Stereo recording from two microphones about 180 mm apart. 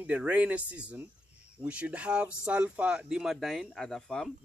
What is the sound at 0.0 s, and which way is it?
Speech, 5° right (ahead or behind).